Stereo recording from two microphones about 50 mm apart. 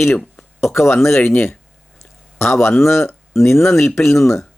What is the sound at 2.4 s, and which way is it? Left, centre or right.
Speech, left.